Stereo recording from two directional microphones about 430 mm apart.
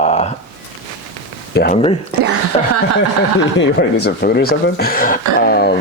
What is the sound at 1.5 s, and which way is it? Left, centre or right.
Speech, left.